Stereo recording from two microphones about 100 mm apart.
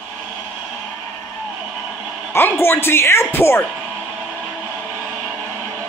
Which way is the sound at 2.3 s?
25° left (ahead or behind).